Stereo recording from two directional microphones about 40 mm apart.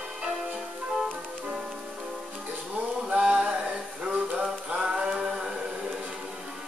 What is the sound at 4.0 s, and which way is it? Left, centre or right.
Music, right.